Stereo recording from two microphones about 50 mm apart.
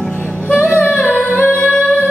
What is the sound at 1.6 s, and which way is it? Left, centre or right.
Music, left.